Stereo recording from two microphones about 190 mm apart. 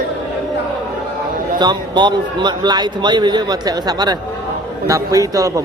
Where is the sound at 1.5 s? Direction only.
25° right (ahead or behind).